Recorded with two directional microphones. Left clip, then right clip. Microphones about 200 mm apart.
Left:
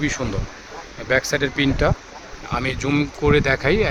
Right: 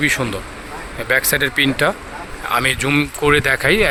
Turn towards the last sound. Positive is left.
turn(degrees=0)  # may be behind; listen again after turning